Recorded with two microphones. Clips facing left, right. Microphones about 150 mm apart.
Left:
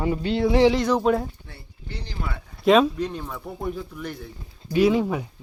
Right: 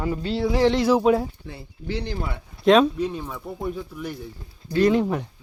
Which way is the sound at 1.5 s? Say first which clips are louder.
Right 10 dB; 90° right.